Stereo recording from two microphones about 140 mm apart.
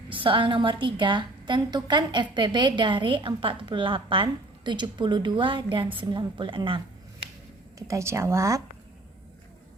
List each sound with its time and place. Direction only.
0.1 s a woman's voice: 40° right (ahead or behind)
7.8 s speech: 20° right (ahead or behind)